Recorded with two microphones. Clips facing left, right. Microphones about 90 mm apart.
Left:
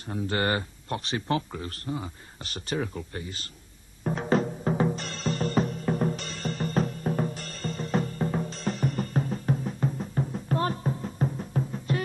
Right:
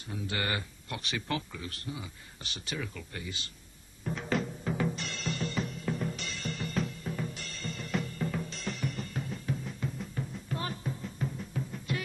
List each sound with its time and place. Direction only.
0.1 s speech: 40° left (ahead or behind)
4.0 s music: 40° left (ahead or behind)